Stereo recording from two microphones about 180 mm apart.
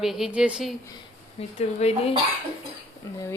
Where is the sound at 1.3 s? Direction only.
35° left (ahead or behind).